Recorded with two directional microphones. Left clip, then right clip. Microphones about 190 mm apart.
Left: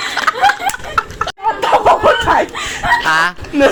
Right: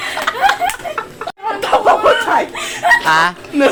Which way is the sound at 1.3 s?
5° left (ahead or behind).